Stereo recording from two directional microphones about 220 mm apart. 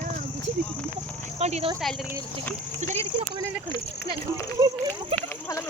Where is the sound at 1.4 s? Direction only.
25° right (ahead or behind).